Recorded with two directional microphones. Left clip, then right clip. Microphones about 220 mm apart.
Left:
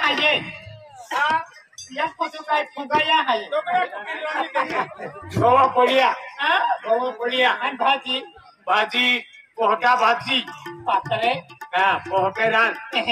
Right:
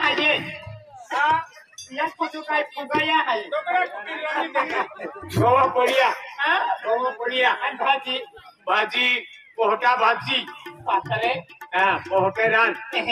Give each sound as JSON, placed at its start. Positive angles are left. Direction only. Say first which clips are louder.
{"t": 0.0, "sound": "a sound", "louder": "left 1 dB", "side_deg": 40}
{"t": 1.0, "sound": "music", "louder": "even", "side_deg": 55}
{"t": 2.0, "sound": "speech", "louder": "left 1 dB", "side_deg": 40}
{"t": 3.4, "sound": "speech", "louder": "left 1 dB", "side_deg": 20}
{"t": 5.4, "sound": "speech", "louder": "left 2 dB", "side_deg": 40}